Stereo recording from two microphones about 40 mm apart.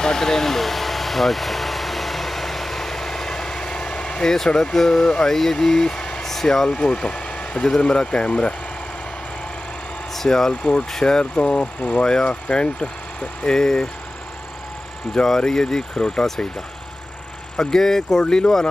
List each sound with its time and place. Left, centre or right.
0.0 s vehicle: centre
6.2 s speech: centre; by 8.5 s left
10.1 s speech: centre
10.5 s speech: left
15.2 s speech: centre
17.6 s speech: centre
18.2 s speech: left